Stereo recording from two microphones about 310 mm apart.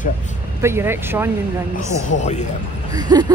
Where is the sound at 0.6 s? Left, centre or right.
Centre.